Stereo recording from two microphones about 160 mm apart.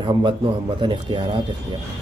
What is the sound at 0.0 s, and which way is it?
Speech, 30° right (ahead or behind).